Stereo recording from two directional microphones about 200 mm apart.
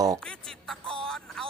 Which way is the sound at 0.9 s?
Centre (ahead or behind).